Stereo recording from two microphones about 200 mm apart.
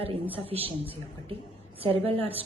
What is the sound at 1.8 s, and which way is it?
Speech, 30° right (ahead or behind).